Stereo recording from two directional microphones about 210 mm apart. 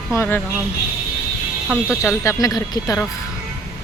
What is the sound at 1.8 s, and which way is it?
Speech, 10° left (ahead or behind).